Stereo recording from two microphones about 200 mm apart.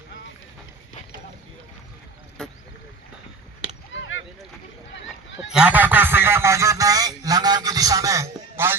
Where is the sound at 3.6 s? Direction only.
75° left (ahead or behind).